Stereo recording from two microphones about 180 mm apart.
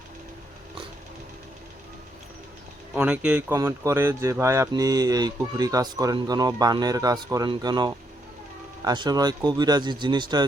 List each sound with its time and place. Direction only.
2.9 s speech: 10° right (ahead or behind); by 10.4 s 25° right (ahead or behind)